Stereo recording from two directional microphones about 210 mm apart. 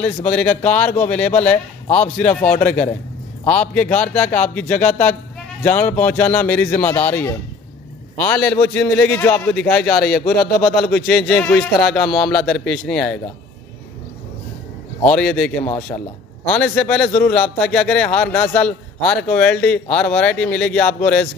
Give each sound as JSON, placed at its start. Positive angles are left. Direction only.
{"t": 0.3, "sound": "a man's voice", "side_deg": 5}
{"t": 10.2, "sound": "speech", "side_deg": 50}
{"t": 10.6, "sound": "speech", "side_deg": 5}
{"t": 15.0, "sound": "speech", "side_deg": 5}
{"t": 15.9, "sound": "speech", "side_deg": 30}
{"t": 16.4, "sound": "a man's voice", "side_deg": 5}